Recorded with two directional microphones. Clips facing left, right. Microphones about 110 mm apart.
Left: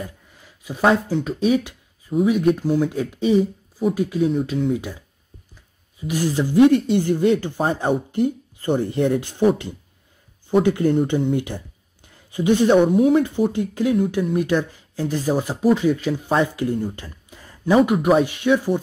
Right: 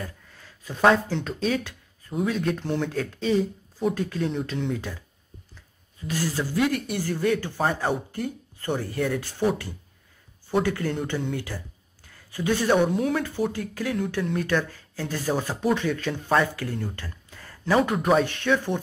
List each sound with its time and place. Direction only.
0.0 s a sound: 15° left (ahead or behind)
2.2 s speech: 15° left (ahead or behind)
10.6 s speech: 20° left (ahead or behind)